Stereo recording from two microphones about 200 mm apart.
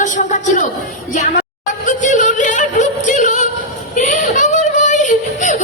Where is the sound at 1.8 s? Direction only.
40° left (ahead or behind).